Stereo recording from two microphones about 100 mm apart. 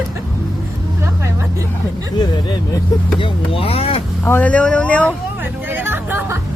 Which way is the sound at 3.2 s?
70° left (ahead or behind).